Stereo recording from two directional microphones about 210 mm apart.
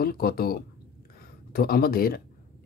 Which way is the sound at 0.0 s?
45° left (ahead or behind).